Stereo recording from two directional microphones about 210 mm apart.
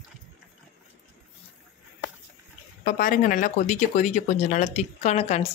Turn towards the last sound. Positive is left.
turn(degrees=30)  # may be behind; listen again after turning